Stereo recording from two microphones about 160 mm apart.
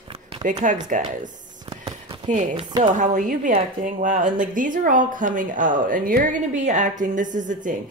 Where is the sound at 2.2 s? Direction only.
45° right (ahead or behind).